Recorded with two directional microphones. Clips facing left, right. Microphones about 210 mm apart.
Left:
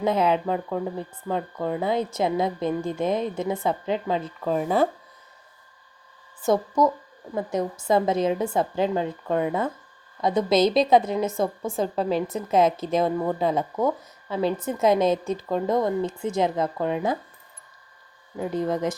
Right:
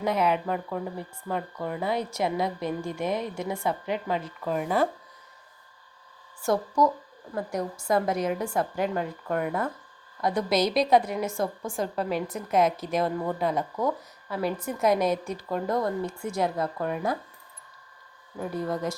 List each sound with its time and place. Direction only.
0.0 s speech: 25° left (ahead or behind)
6.4 s speech: 20° left (ahead or behind)
18.3 s speech: 20° left (ahead or behind)